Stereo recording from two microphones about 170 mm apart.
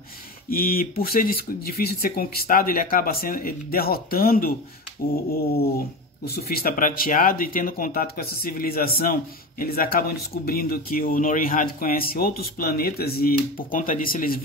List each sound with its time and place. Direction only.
0.5 s speech: 60° left (ahead or behind)